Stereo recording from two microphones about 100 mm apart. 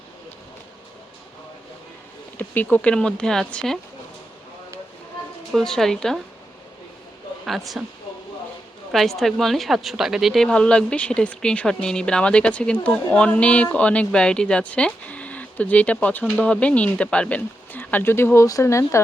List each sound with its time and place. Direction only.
2.4 s a woman's voice: 15° left (ahead or behind)
5.5 s speech: 5° left (ahead or behind)
7.8 s speech: 10° right (ahead or behind)
8.9 s a woman's voice: centre (ahead or behind); by 19.0 s 30° left (ahead or behind)